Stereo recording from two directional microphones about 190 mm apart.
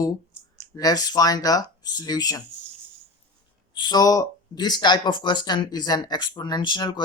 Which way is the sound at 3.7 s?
20° left (ahead or behind).